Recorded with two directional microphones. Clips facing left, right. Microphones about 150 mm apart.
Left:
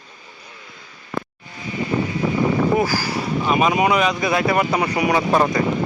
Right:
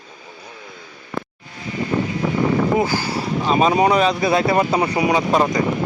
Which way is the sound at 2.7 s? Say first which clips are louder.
Even; 25° right (ahead or behind).